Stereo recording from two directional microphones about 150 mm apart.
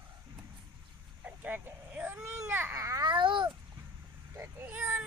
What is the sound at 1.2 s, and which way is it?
Baby cry, 10° right (ahead or behind).